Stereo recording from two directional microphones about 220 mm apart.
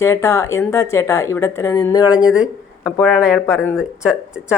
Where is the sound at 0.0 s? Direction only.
10° left (ahead or behind).